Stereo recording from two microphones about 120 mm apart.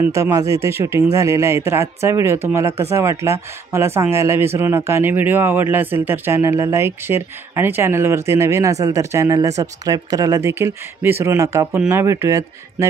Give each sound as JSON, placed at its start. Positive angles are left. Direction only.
{"t": 0.1, "sound": "speech", "side_deg": -25}